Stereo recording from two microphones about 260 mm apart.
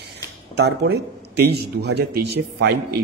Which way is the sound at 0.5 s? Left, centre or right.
Right.